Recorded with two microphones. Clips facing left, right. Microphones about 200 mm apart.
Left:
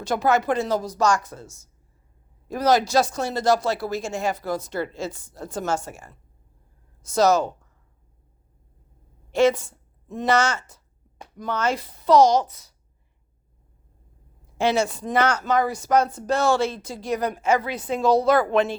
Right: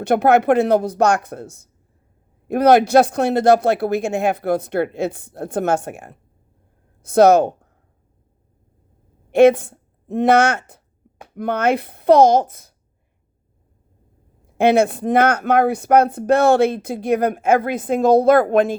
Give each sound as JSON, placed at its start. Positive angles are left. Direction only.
{"t": 0.0, "sound": "speech", "side_deg": -60}
{"t": 9.3, "sound": "speech", "side_deg": -60}
{"t": 14.4, "sound": "speech", "side_deg": -55}